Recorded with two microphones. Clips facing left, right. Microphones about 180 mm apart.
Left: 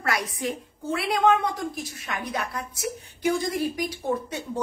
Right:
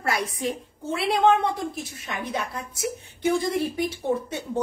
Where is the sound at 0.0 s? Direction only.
25° right (ahead or behind).